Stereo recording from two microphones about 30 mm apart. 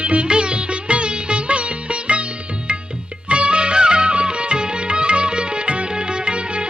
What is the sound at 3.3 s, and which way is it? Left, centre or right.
Music, right.